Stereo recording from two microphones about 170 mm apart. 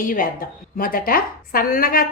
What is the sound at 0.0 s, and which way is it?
A woman's voice, 55° left (ahead or behind).